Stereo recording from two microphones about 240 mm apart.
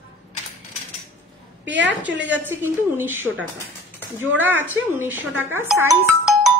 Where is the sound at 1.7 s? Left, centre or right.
Right.